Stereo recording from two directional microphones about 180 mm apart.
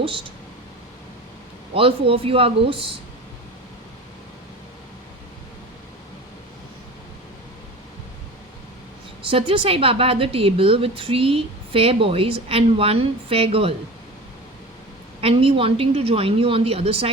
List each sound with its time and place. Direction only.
1.7 s a woman's voice: 30° right (ahead or behind)
9.2 s a woman's voice: 30° right (ahead or behind)
15.2 s a woman's voice: 30° right (ahead or behind)